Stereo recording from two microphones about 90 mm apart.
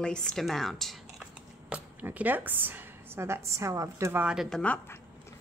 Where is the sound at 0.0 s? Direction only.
10° left (ahead or behind).